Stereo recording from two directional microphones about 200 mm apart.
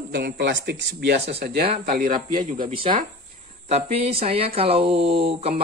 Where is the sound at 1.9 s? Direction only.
45° right (ahead or behind).